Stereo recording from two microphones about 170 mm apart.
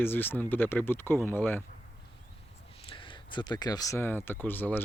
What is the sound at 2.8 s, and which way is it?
Speech, 30° left (ahead or behind).